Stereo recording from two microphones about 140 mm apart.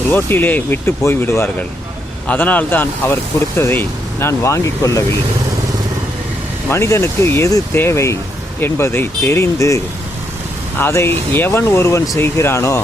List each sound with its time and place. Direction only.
0.1 s speech: 15° left (ahead or behind)
6.7 s speech: 20° left (ahead or behind)